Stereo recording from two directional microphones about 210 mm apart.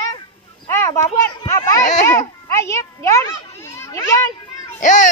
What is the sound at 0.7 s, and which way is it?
Speech, 15° left (ahead or behind).